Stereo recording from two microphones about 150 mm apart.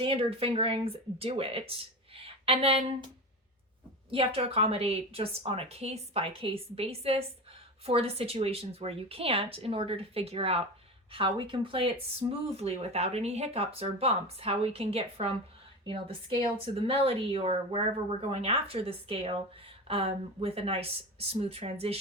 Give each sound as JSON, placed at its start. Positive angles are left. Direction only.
{"t": 0.0, "sound": "speech", "side_deg": -40}
{"t": 4.1, "sound": "speech", "side_deg": -40}